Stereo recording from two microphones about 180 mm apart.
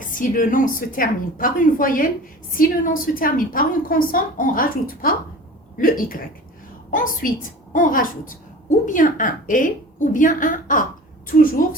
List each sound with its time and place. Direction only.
0.1 s a woman's voice: 50° left (ahead or behind)